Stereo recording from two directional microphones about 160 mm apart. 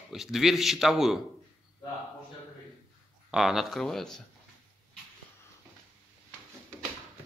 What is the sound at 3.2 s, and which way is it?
Speech, centre (ahead or behind).